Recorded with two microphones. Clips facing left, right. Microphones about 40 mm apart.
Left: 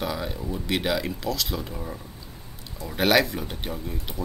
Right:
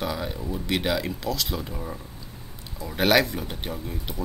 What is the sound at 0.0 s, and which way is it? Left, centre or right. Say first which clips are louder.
Speech: even; centre.